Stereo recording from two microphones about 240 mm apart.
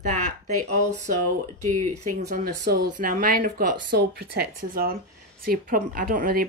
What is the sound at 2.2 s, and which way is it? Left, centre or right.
Speech, right.